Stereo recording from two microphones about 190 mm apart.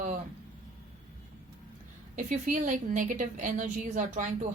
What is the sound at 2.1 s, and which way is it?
A woman's voice, 40° right (ahead or behind).